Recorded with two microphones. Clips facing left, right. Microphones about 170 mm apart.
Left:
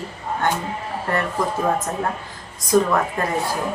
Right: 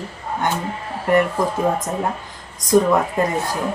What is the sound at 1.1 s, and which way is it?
Speech, 15° right (ahead or behind).